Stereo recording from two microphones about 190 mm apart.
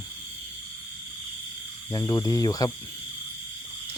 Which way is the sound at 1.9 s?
15° left (ahead or behind).